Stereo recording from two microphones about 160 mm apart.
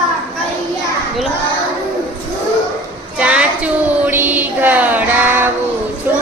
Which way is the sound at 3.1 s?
5° right (ahead or behind).